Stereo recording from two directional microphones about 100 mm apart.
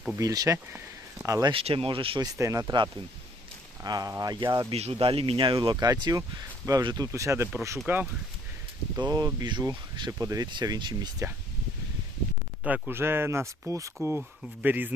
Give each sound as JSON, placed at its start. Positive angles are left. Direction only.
{"t": 0.2, "sound": "speech", "side_deg": -35}
{"t": 1.5, "sound": "speech", "side_deg": -70}
{"t": 2.2, "sound": "speech", "side_deg": -35}
{"t": 3.8, "sound": "speech", "side_deg": -45}
{"t": 4.7, "sound": "speech", "side_deg": -80}
{"t": 5.8, "sound": "speech", "side_deg": -35}
{"t": 7.1, "sound": "speech", "side_deg": -30}
{"t": 9.0, "sound": "speech", "side_deg": -40}
{"t": 10.1, "sound": "speech", "side_deg": -35}
{"t": 12.9, "sound": "speech", "side_deg": -25}
{"t": 14.2, "sound": "speech", "side_deg": -15}